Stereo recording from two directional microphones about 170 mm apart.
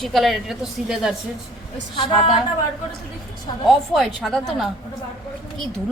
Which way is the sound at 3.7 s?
Centre (ahead or behind).